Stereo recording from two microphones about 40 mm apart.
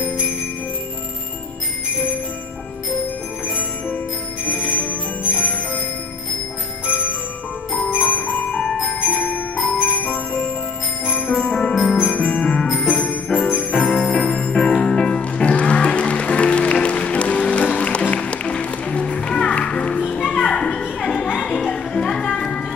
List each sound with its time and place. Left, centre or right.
3.4 s bell: left
4.5 s bell: left
7.9 s bell: left
8.5 s music: left
9.0 s music: left
11.1 s bell: left
11.3 s music: left
12.8 s bell: left
13.7 s jingle bell: left
14.0 s music: left
14.3 s music: centre